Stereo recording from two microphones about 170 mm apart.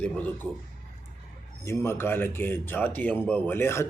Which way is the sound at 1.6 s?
15° left (ahead or behind).